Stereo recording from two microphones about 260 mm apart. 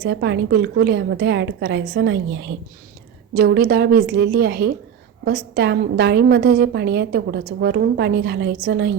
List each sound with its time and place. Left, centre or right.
0.0 s a woman's voice: right